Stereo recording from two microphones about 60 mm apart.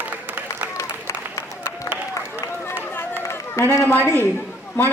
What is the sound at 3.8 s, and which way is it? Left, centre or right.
Speech, left.